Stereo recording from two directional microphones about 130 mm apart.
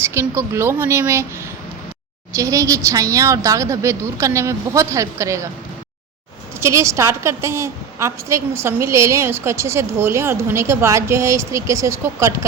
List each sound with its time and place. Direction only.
0.0 s a woman's voice: 20° right (ahead or behind)
2.3 s a woman's voice: 25° right (ahead or behind)
6.6 s a woman's voice: 20° right (ahead or behind)